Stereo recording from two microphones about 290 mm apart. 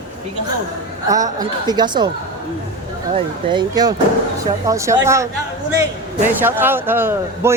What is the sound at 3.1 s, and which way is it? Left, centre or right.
Speech, centre.